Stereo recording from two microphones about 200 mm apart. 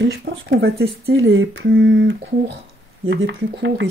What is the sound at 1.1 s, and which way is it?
Speech, 85° right.